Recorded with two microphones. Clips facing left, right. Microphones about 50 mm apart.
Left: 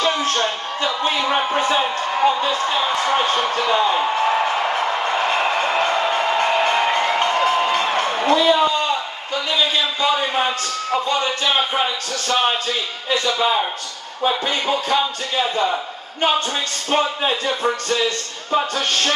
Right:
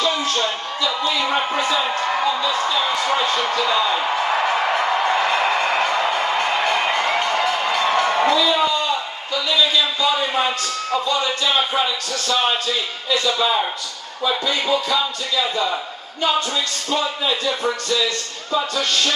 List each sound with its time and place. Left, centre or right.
0.0 s music: left
1.4 s speech: left
5.3 s a sound: left
9.3 s speech: left